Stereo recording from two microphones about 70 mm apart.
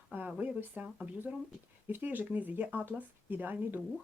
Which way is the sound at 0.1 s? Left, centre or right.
Right.